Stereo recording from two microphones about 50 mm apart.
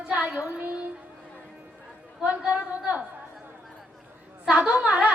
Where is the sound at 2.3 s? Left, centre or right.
Right.